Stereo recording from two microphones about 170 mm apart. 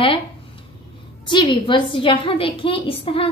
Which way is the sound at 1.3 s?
30° left (ahead or behind).